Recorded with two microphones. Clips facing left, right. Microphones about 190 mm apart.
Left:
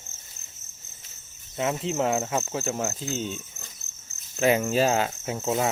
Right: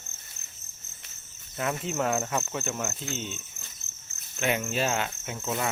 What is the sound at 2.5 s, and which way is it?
Cricket, 35° left (ahead or behind).